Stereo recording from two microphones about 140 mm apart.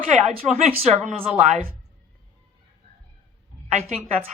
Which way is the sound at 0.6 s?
55° right (ahead or behind).